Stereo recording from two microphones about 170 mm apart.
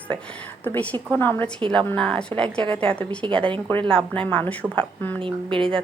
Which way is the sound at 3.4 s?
30° right (ahead or behind).